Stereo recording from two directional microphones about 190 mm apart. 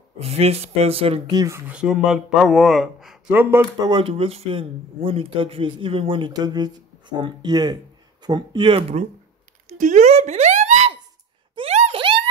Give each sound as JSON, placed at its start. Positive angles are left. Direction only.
{"t": 0.2, "sound": "speech", "side_deg": -30}
{"t": 1.4, "sound": "speech", "side_deg": -10}
{"t": 3.9, "sound": "speech", "side_deg": -30}
{"t": 9.7, "sound": "a sound", "side_deg": -40}